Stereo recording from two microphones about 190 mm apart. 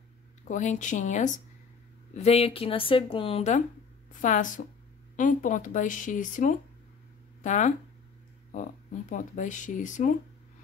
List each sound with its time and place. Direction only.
0.5 s speech: 40° left (ahead or behind)
9.1 s speech: 40° left (ahead or behind)